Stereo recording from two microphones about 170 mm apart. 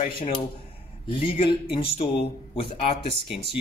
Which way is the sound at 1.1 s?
30° left (ahead or behind).